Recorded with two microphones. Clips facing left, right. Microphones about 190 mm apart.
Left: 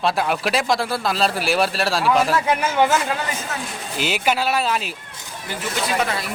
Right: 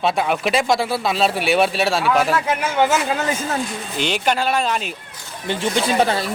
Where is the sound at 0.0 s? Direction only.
Centre (ahead or behind).